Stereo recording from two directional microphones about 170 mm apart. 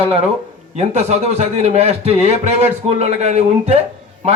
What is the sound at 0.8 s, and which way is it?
A man's voice, 40° right (ahead or behind).